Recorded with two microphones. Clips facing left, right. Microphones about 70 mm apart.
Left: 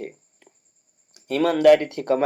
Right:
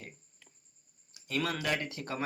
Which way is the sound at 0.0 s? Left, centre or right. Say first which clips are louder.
Left 15 dB; left.